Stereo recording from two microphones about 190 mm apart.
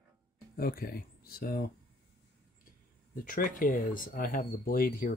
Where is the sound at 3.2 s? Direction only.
45° left (ahead or behind).